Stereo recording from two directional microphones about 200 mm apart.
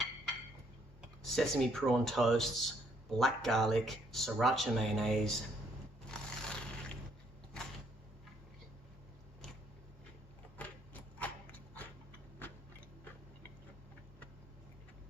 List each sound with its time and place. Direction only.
1.2 s speech: centre (ahead or behind)
6.1 s scrape: 5° left (ahead or behind)
10.6 s a sound: 10° left (ahead or behind)